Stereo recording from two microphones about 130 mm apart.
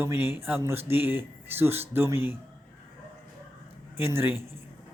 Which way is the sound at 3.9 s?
15° right (ahead or behind).